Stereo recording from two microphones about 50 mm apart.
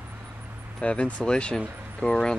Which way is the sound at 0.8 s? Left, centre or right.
Left.